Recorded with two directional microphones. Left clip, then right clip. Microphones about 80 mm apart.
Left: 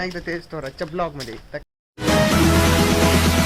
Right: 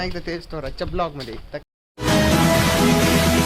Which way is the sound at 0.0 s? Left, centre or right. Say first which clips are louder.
Left 1 dB; centre.